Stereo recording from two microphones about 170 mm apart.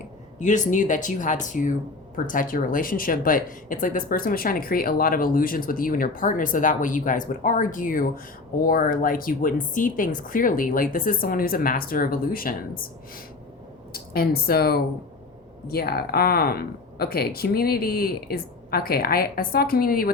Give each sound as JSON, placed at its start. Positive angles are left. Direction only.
{"t": 0.3, "sound": "speech", "side_deg": 45}
{"t": 13.9, "sound": "speech", "side_deg": 60}